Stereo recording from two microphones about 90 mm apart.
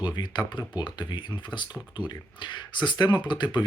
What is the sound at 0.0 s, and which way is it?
Speech, 55° left (ahead or behind).